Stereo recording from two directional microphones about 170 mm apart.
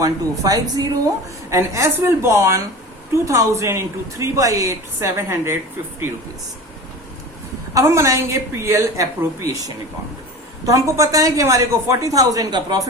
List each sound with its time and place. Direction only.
0.0 s a woman's voice: 20° right (ahead or behind)
7.7 s a woman's voice: 20° right (ahead or behind)
10.7 s a woman's voice: 20° right (ahead or behind)